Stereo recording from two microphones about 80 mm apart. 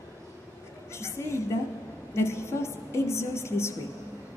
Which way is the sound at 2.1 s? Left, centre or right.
Left.